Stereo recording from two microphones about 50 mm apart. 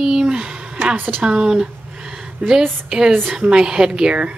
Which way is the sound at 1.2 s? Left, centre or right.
Centre.